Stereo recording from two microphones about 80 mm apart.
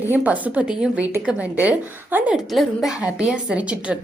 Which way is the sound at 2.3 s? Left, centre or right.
Centre.